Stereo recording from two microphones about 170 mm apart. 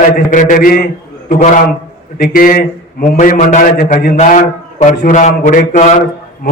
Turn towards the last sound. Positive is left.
turn(degrees=45)  # may be behind; listen again after turning